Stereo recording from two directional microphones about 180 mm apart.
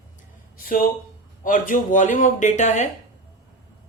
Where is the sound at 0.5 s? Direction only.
50° left (ahead or behind).